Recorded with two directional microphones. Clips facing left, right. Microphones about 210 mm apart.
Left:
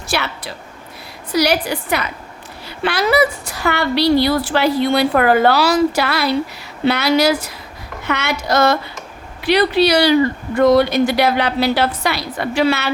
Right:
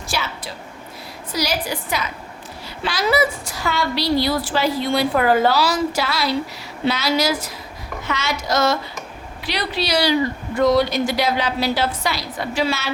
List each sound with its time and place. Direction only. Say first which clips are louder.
0.1 s a woman's voice: left 5 dB; 65° left (ahead or behind)